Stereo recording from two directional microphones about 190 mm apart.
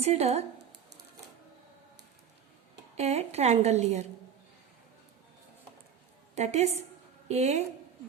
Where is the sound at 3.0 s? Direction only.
35° right (ahead or behind).